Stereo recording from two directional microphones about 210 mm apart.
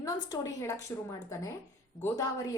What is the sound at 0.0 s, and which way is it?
Speech, 15° left (ahead or behind).